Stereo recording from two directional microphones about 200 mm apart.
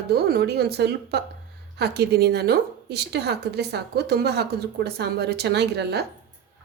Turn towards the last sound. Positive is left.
turn(degrees=-55)  # may be behind; listen again after turning